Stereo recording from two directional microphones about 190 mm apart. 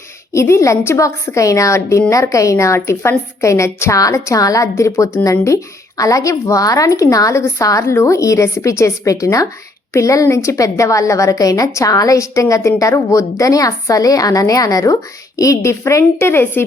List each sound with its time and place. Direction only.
0.3 s a woman's voice: 15° left (ahead or behind)